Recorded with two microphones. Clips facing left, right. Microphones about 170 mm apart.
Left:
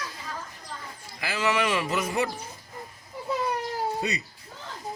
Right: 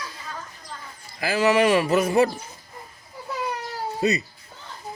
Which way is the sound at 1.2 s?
35° right (ahead or behind).